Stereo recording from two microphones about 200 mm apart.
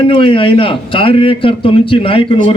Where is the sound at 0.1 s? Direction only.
25° left (ahead or behind).